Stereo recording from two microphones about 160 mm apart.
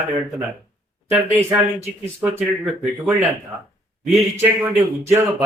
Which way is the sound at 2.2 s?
10° right (ahead or behind).